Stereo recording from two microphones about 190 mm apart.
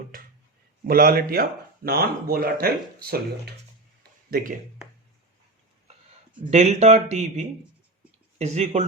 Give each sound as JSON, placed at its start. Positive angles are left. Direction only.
{"t": 0.9, "sound": "speech", "side_deg": -50}
{"t": 6.5, "sound": "speech", "side_deg": -35}